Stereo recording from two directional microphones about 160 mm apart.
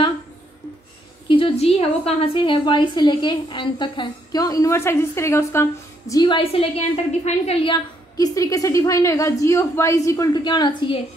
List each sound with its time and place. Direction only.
1.3 s a woman's voice: 35° left (ahead or behind)